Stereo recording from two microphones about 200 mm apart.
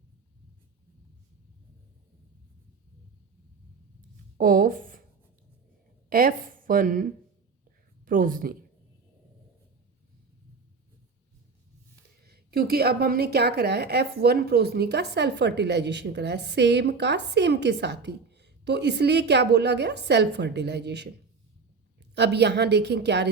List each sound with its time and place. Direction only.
4.4 s speech: 45° right (ahead or behind)
6.1 s a woman's voice: 45° right (ahead or behind)
12.2 s a woman's voice: 50° right (ahead or behind)
22.1 s a woman's voice: 55° right (ahead or behind)